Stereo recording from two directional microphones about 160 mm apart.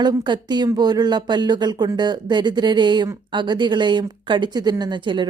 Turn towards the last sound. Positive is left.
turn(degrees=-30)  # may be behind; listen again after turning